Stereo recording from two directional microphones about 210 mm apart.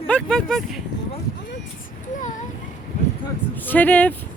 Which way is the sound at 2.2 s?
35° left (ahead or behind).